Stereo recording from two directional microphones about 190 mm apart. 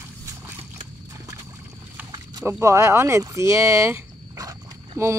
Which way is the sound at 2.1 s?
20° right (ahead or behind).